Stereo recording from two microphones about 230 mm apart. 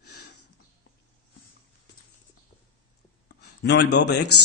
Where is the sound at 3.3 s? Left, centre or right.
Left.